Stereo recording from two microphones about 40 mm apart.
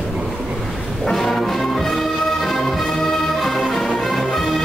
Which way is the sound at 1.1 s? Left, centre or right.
Centre.